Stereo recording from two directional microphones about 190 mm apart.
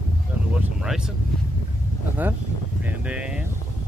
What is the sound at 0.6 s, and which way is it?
Vehicle, 5° right (ahead or behind).